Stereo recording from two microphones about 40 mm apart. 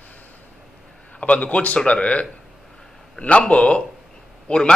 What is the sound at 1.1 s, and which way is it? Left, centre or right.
A man's voice, left.